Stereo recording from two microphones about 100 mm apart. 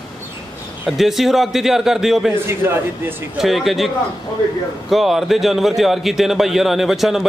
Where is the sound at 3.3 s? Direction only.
Centre (ahead or behind).